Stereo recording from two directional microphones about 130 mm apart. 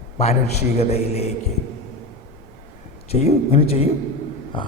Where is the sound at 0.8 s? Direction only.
55° left (ahead or behind).